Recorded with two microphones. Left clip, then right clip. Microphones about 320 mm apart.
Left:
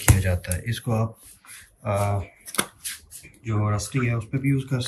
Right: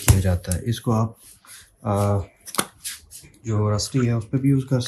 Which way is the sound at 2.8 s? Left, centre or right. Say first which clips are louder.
Right 1 dB; centre.